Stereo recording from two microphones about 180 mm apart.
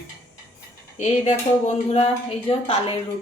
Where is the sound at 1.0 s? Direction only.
40° left (ahead or behind).